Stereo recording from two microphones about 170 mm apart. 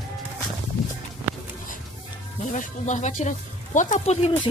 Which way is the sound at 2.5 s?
45° left (ahead or behind).